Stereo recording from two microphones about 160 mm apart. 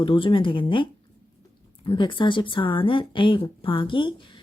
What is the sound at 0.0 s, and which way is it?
Speech, 30° left (ahead or behind).